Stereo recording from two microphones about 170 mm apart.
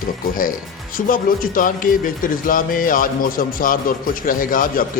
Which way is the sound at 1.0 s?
55° left (ahead or behind).